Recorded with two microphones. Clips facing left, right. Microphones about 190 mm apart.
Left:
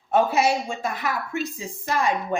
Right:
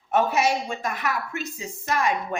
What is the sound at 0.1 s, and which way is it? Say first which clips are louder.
A woman's voice: left 2 dB; 30° left (ahead or behind).